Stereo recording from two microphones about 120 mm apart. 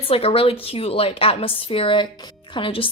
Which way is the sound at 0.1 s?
55° left (ahead or behind).